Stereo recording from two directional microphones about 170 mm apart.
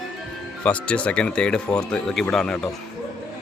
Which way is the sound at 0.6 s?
5° left (ahead or behind).